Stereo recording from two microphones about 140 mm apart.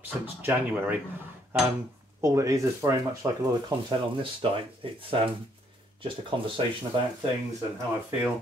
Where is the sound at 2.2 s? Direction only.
20° right (ahead or behind); by 6.6 s 40° right (ahead or behind).